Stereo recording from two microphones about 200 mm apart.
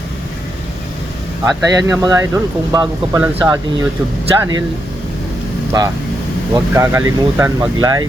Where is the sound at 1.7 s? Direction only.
15° right (ahead or behind).